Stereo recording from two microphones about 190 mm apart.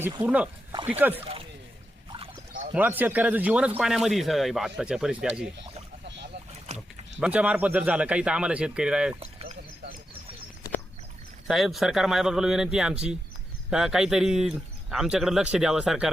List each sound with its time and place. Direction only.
0.2 s speech: 5° right (ahead or behind)
1.1 s speech: 30° right (ahead or behind)
2.7 s speech: 10° right (ahead or behind)
6.7 s speech: 5° right (ahead or behind)
9.2 s a sound: 35° right (ahead or behind)
11.4 s speech: centre (ahead or behind)